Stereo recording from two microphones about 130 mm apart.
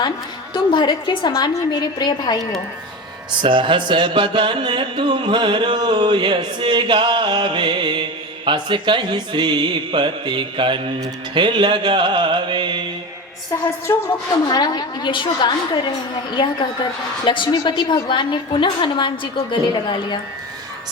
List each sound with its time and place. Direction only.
0.5 s a woman's voice: 35° left (ahead or behind)
3.4 s a sound: 40° right (ahead or behind)
13.8 s speech: 20° left (ahead or behind)
14.5 s a woman's voice: 30° left (ahead or behind)